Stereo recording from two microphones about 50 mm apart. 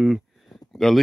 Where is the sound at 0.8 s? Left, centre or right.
Centre.